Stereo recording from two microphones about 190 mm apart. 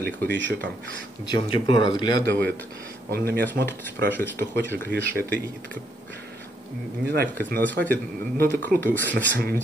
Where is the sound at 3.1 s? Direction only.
55° right (ahead or behind).